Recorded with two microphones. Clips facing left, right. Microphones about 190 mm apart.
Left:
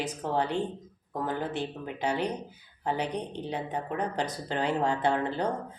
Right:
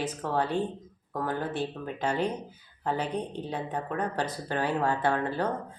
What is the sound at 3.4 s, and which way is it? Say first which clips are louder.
Speech: even; 20° left (ahead or behind).